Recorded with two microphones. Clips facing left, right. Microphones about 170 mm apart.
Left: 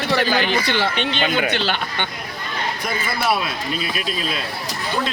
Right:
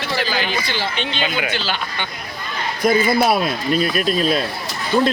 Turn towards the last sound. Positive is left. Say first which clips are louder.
# right 7 dB
turn(degrees=-45)  # may be behind; listen again after turning